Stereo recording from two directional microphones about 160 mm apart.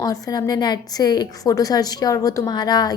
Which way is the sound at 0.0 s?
25° left (ahead or behind).